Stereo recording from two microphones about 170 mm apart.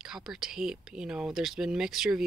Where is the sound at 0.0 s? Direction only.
5° right (ahead or behind).